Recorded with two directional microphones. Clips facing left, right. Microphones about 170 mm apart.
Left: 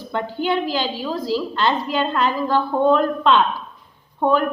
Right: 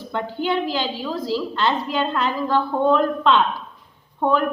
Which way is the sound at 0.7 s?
40° left (ahead or behind).